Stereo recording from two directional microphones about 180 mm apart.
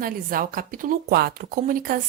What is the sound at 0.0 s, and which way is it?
Speech, 50° right (ahead or behind).